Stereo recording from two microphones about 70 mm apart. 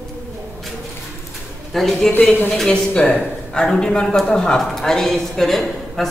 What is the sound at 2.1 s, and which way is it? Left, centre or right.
Speech, left.